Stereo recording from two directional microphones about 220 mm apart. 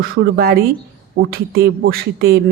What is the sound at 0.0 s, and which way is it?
Speech, 45° right (ahead or behind).